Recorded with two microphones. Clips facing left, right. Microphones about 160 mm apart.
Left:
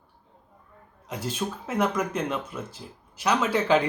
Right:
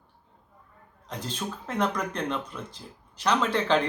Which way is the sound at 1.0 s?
10° left (ahead or behind).